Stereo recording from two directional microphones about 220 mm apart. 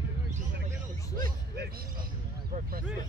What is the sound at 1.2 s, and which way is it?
Music, 40° right (ahead or behind).